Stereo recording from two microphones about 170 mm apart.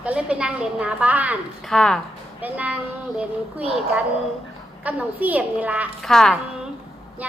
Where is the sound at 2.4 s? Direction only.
10° right (ahead or behind).